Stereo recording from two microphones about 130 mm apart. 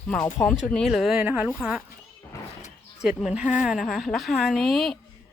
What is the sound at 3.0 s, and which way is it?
A woman's voice, 5° right (ahead or behind).